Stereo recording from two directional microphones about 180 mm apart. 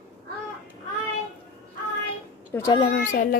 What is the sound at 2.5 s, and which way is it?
Speech, 10° left (ahead or behind).